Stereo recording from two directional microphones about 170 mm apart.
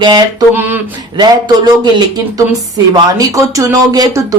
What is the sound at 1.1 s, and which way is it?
Speech, 25° right (ahead or behind).